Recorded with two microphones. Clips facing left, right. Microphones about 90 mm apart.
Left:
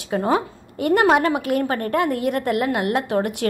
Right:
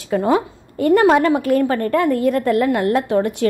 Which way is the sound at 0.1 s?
25° left (ahead or behind).